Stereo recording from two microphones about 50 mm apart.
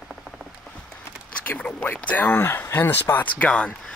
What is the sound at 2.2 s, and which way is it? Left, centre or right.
Speech, left.